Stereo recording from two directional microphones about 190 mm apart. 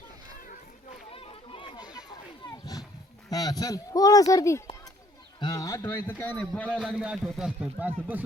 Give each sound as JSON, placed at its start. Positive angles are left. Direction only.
{"t": 1.1, "sound": "run", "side_deg": 30}
{"t": 2.5, "sound": "roaring cats", "side_deg": 20}
{"t": 3.2, "sound": "a man's voice", "side_deg": 20}